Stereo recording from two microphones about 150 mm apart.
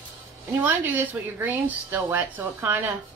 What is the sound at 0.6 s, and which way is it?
Speech, 10° right (ahead or behind).